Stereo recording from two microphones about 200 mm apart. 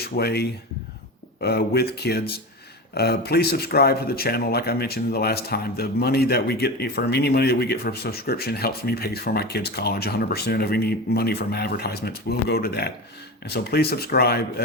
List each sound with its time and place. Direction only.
0.0 s speech: 50° left (ahead or behind)